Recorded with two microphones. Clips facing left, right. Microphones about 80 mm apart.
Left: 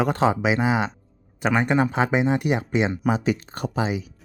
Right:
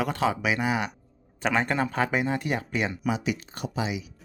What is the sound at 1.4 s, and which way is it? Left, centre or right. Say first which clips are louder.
Speech: left 5 dB; centre.